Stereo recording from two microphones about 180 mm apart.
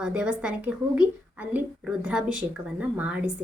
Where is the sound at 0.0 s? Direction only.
5° right (ahead or behind).